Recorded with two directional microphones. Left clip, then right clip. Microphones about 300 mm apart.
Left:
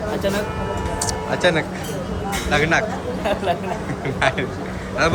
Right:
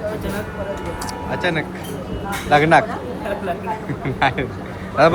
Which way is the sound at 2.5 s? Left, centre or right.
Centre.